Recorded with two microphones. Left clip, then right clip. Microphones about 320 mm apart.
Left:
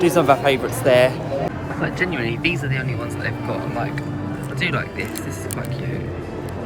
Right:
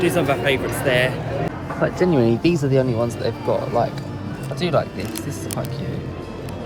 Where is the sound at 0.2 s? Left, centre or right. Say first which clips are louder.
Left 3 dB; centre.